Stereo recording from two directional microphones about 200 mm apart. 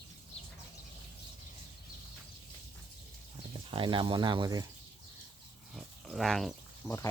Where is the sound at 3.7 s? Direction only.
25° right (ahead or behind).